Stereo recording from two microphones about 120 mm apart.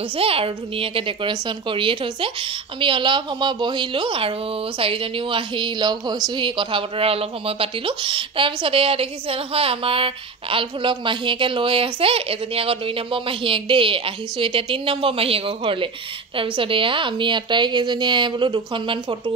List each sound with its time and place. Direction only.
0.1 s a woman's voice: 50° right (ahead or behind)